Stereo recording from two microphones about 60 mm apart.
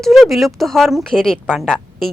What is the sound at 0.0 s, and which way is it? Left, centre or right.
Speech, centre.